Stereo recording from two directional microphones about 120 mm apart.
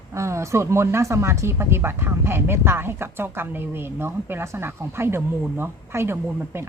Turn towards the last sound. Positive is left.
turn(degrees=-20)  # may be behind; listen again after turning